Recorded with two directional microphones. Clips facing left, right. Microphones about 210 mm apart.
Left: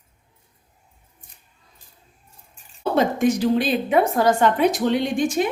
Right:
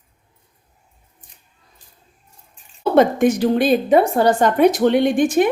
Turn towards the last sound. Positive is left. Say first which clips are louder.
# right 6 dB
turn(degrees=-55)  # may be behind; listen again after turning